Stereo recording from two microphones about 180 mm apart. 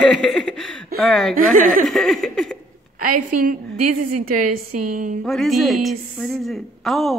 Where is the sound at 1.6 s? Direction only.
50° right (ahead or behind).